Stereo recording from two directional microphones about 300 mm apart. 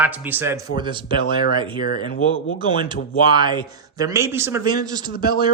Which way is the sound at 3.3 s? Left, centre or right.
Centre.